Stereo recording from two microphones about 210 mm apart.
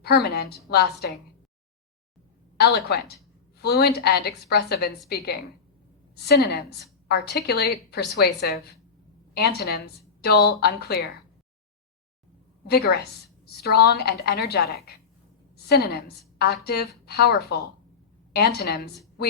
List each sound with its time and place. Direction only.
0.0 s a woman's voice: 50° left (ahead or behind)
2.6 s a woman's voice: 50° left (ahead or behind)
12.6 s a woman's voice: 50° left (ahead or behind)